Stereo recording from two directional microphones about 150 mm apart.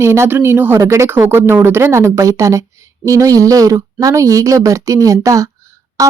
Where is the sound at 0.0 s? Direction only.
15° right (ahead or behind).